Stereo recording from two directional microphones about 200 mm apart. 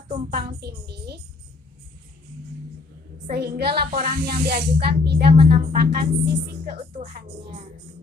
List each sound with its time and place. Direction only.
0.3 s music: 55° right (ahead or behind)
3.2 s speech: 55° right (ahead or behind)